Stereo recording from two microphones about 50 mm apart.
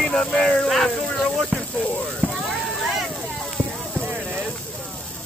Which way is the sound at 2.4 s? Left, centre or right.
Centre.